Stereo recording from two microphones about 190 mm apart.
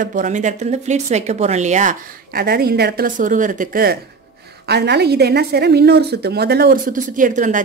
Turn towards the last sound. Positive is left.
turn(degrees=-40)  # may be behind; listen again after turning